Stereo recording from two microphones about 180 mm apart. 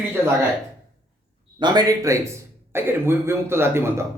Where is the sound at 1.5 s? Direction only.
25° right (ahead or behind).